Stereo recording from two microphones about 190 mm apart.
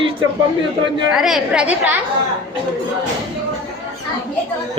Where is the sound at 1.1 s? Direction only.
Centre (ahead or behind).